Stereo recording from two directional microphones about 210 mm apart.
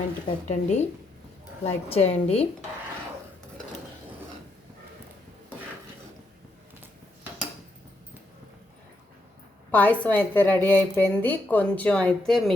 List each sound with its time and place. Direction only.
0.4 s a woman's voice: 35° left (ahead or behind)
9.7 s speech: 5° left (ahead or behind)